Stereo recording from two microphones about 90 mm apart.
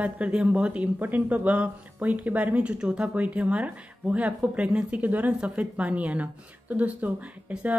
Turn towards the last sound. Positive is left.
turn(degrees=-15)  # may be behind; listen again after turning